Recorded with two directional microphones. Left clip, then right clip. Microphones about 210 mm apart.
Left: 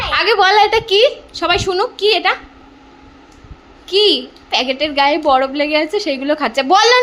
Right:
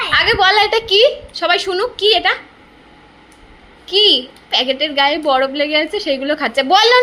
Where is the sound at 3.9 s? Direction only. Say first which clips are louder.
Right 1 dB; 15° left (ahead or behind).